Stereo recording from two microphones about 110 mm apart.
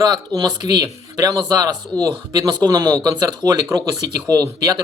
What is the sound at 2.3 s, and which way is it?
A man's voice, 30° right (ahead or behind).